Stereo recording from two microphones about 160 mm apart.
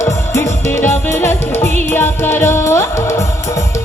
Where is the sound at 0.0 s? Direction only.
20° left (ahead or behind).